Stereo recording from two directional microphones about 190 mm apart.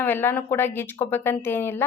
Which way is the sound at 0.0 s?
10° left (ahead or behind).